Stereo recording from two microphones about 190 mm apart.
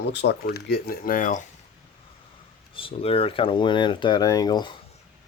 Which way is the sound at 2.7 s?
30° left (ahead or behind).